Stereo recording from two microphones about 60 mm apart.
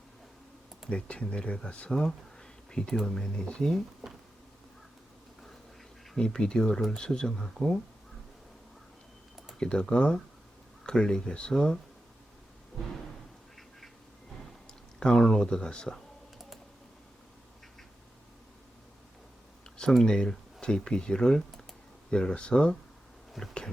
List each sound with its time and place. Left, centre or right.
0.9 s speech: centre
1.9 s speech: centre
6.1 s speech: centre
9.6 s speech: centre
14.9 s speech: centre
20.0 s speech: centre
23.4 s a sound: centre